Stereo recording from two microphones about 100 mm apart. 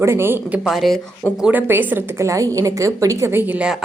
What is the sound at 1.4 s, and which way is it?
A woman's voice, 20° right (ahead or behind).